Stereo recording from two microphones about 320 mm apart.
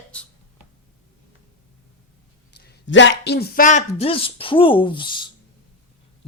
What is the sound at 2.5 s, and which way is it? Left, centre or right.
A man's voice, left.